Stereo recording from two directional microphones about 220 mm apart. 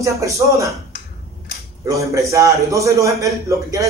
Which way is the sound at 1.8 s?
15° right (ahead or behind).